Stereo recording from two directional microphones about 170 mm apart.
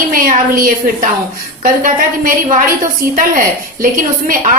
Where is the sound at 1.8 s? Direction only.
55° right (ahead or behind).